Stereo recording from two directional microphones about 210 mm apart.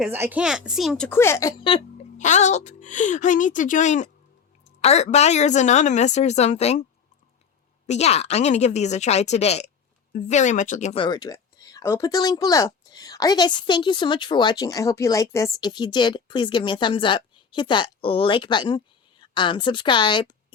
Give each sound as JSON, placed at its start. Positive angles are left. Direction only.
{"t": 0.0, "sound": "a woman's voice", "side_deg": -10}
{"t": 2.1, "sound": "a woman's voice", "side_deg": 35}
{"t": 7.9, "sound": "a woman's voice", "side_deg": 30}